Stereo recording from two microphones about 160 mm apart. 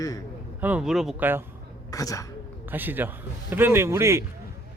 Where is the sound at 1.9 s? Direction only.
20° left (ahead or behind).